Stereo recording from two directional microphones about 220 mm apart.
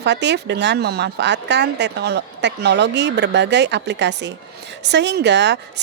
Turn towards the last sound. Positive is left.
turn(degrees=-50)  # may be behind; listen again after turning